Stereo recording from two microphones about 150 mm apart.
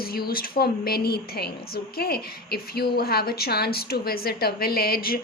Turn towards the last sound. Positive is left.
turn(degrees=85)